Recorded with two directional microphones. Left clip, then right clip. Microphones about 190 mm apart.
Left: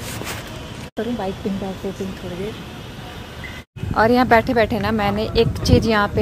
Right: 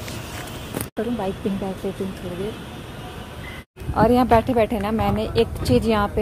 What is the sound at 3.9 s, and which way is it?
A woman's voice, 5° right (ahead or behind).